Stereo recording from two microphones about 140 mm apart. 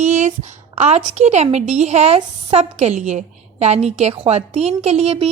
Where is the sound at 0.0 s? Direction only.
55° right (ahead or behind).